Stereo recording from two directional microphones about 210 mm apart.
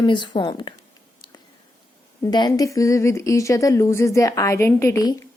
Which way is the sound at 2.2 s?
20° left (ahead or behind).